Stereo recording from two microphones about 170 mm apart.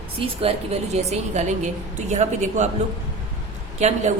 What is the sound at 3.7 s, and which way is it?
Speech, 40° right (ahead or behind).